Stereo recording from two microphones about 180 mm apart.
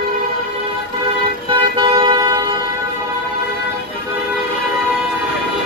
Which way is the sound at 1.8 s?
25° right (ahead or behind).